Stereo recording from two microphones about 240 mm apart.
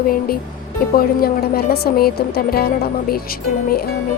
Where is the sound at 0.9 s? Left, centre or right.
Left.